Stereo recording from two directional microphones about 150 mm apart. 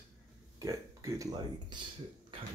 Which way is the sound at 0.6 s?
20° right (ahead or behind).